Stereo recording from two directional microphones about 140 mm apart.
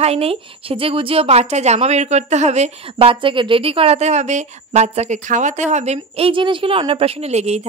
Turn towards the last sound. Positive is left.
turn(degrees=-50)  # may be behind; listen again after turning